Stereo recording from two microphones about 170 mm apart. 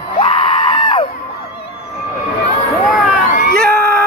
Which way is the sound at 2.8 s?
Centre (ahead or behind).